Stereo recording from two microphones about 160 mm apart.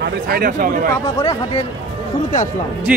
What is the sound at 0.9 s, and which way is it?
Speech, 20° left (ahead or behind).